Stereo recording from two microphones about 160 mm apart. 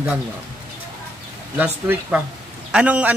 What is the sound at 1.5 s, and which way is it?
A man's voice, 10° right (ahead or behind).